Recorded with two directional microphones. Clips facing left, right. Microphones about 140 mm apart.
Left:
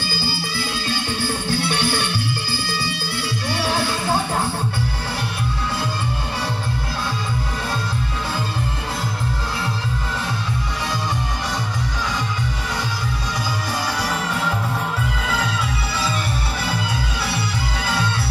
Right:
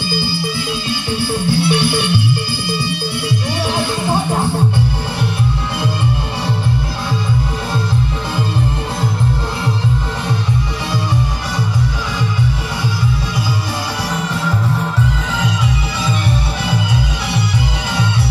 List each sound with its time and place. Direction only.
0.1 s music: 15° right (ahead or behind)
3.4 s music: 20° right (ahead or behind)